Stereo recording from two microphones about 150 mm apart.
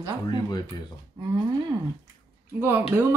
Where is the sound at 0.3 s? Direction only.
30° left (ahead or behind).